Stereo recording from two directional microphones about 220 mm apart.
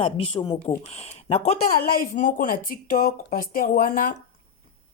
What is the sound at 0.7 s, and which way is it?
Speech, 30° left (ahead or behind).